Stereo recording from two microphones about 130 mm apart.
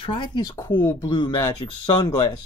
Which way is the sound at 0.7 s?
15° left (ahead or behind).